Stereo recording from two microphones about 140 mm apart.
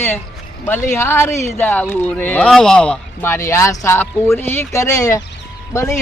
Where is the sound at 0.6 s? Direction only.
15° left (ahead or behind).